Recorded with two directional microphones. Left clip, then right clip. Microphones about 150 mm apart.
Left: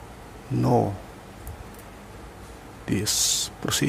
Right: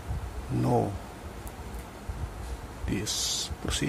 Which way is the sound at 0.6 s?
20° left (ahead or behind).